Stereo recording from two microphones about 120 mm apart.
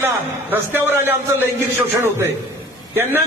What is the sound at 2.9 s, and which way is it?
Speech, 20° right (ahead or behind).